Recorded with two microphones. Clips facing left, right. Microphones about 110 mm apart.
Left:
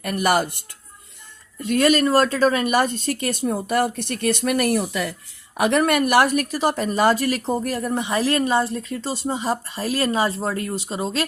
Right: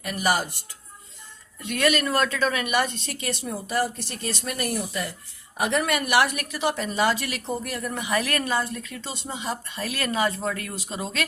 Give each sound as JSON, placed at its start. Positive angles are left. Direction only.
{"t": 0.0, "sound": "speech", "side_deg": 55}
{"t": 1.6, "sound": "a woman's voice", "side_deg": 35}
{"t": 5.5, "sound": "speech", "side_deg": 65}
{"t": 5.8, "sound": "a woman's voice", "side_deg": 45}